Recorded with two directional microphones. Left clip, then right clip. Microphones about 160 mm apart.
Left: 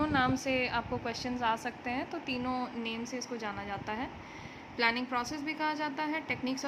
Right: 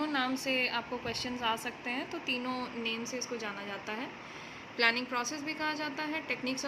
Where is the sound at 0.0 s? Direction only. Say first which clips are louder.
Left 3 dB; 20° left (ahead or behind).